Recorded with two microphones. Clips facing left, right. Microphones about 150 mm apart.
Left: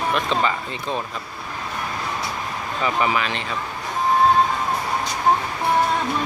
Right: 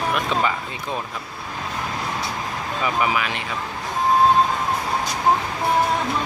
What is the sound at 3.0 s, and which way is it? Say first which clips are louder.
Speech: left 1 dB; 10° right (ahead or behind).